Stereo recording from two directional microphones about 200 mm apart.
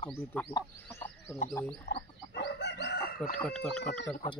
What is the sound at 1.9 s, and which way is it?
Chicken, 60° left (ahead or behind).